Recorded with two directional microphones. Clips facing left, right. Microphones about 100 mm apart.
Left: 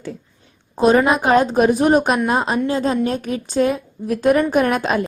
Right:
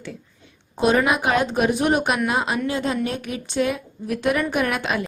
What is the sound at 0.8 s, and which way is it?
A woman's voice, 35° left (ahead or behind).